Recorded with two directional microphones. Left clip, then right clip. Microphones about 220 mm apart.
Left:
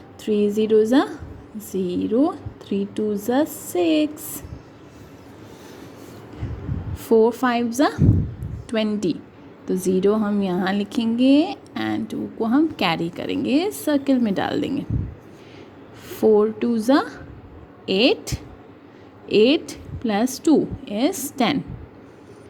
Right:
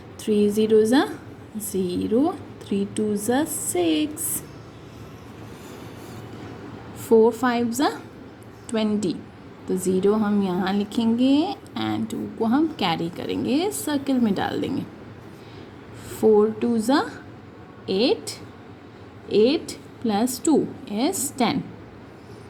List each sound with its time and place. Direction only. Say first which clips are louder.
0.3 s a woman's voice: even; 15° left (ahead or behind)
7.0 s a woman's voice: even; 15° left (ahead or behind)
8.7 s a woman's voice: left 2 dB; 20° left (ahead or behind)
16.0 s a woman's voice: left 1 dB; 15° left (ahead or behind)